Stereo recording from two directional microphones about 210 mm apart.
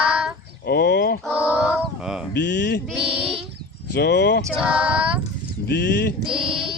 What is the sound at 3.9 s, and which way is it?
Speech, 50° left (ahead or behind).